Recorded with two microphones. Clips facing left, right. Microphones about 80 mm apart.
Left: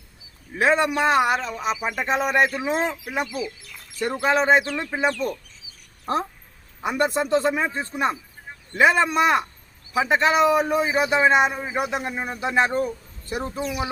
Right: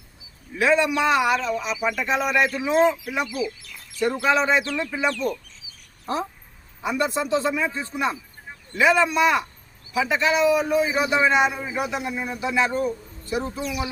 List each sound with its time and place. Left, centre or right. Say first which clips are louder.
0.6 s speech: even; left
3.2 s bird: right 2 dB; centre
4.0 s a man's voice: even; left
6.8 s a man's voice: left 1 dB; left